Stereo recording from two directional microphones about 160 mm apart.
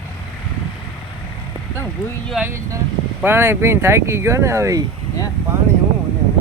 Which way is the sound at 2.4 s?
15° right (ahead or behind).